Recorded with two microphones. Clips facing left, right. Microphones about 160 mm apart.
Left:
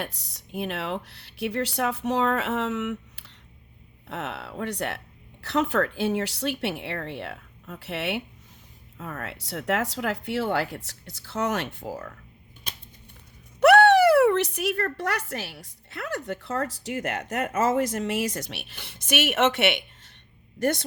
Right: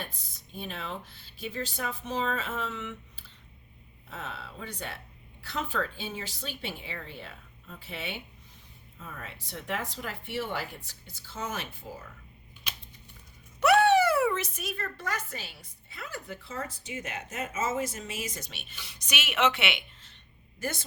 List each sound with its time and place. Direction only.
0.0 s speech: 75° left (ahead or behind)
13.6 s speech: 65° left (ahead or behind); by 19.8 s 50° left (ahead or behind)
20.6 s speech: 65° left (ahead or behind)